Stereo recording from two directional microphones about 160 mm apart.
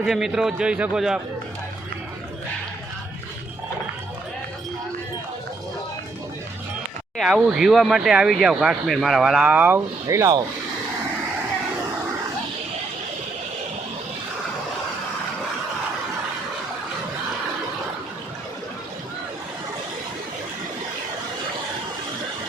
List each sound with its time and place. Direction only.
0.0 s speech: centre (ahead or behind)
7.2 s speech: 5° right (ahead or behind); by 10.4 s 20° right (ahead or behind)